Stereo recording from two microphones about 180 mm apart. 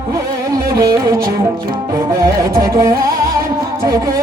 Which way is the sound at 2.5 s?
20° right (ahead or behind).